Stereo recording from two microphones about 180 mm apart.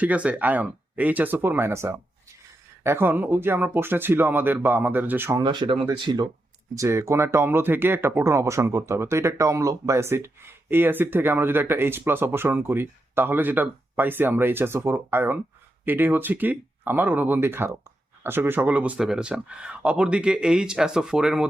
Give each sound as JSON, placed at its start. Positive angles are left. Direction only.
{"t": 0.0, "sound": "speech", "side_deg": -10}
{"t": 5.4, "sound": "speech", "side_deg": -25}